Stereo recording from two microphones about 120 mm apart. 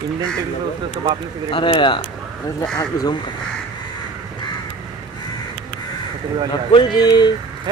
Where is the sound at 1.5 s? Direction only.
45° left (ahead or behind).